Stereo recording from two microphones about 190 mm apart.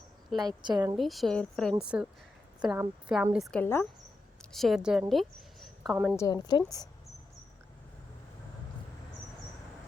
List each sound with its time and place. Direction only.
0.4 s a woman's voice: 20° right (ahead or behind)
0.9 s a woman's voice: centre (ahead or behind)
4.5 s a woman's voice: centre (ahead or behind)
6.1 s a woman's voice: 20° left (ahead or behind)